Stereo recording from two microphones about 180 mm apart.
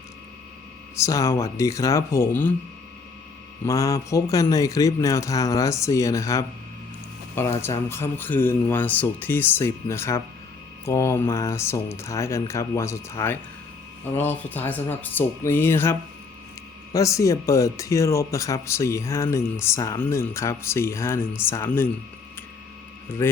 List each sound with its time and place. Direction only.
0.9 s speech: 15° left (ahead or behind)
3.7 s a man's voice: 20° left (ahead or behind)
7.6 s speech: 15° left (ahead or behind)
23.2 s speech: 15° left (ahead or behind)